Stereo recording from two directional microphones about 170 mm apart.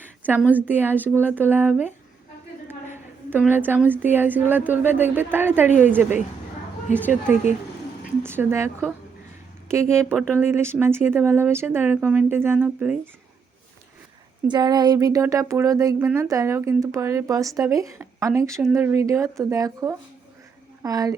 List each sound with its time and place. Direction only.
0.0 s a sound: 10° right (ahead or behind)
0.5 s a woman's voice: 10° right (ahead or behind)
6.9 s a woman's voice: 45° left (ahead or behind)
8.2 s speech: 15° right (ahead or behind)
9.9 s speech: 15° right (ahead or behind)
14.5 s speech: 25° right (ahead or behind)